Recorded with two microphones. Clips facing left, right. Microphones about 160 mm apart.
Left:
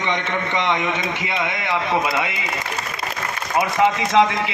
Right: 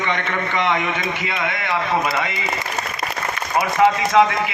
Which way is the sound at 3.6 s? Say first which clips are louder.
Right 2 dB; 20° left (ahead or behind).